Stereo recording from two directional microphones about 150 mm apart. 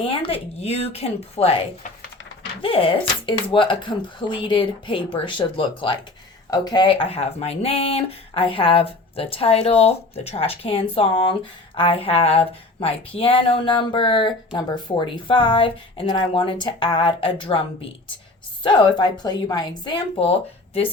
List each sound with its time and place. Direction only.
0.0 s speech: 35° left (ahead or behind)